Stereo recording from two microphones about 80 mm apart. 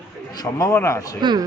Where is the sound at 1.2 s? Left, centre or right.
Right.